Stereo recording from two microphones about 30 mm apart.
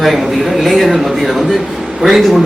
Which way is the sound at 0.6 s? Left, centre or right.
Centre.